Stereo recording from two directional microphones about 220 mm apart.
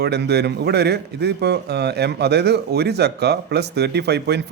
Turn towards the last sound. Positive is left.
turn(degrees=-50)  # may be behind; listen again after turning